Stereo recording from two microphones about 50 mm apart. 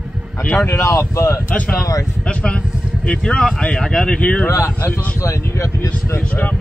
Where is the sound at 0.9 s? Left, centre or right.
Left.